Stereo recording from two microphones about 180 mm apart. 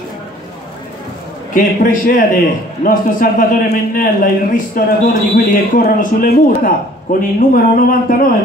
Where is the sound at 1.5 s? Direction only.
55° left (ahead or behind).